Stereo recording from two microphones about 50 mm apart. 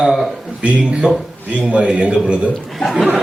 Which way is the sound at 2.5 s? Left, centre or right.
Centre.